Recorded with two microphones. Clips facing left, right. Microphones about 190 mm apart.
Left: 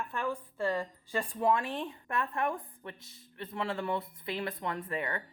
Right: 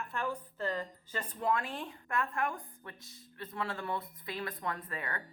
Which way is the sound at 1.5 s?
20° left (ahead or behind).